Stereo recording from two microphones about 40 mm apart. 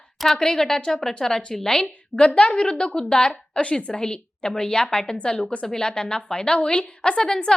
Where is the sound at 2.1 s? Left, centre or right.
Left.